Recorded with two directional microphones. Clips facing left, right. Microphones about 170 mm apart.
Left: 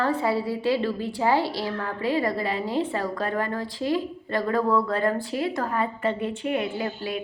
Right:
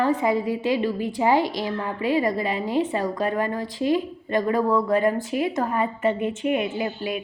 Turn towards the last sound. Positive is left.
turn(degrees=-15)  # may be behind; listen again after turning